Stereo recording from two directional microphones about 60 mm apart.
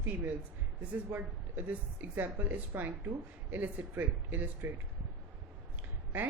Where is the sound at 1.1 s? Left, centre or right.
Right.